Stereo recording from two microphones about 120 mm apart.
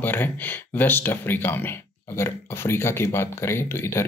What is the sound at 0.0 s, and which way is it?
Speech, 15° left (ahead or behind).